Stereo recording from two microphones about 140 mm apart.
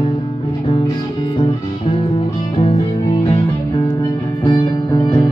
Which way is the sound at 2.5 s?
40° left (ahead or behind).